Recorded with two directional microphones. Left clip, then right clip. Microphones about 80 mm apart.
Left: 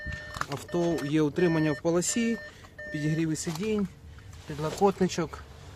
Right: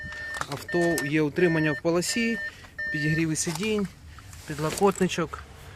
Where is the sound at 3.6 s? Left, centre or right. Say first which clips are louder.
Right 2 dB; centre.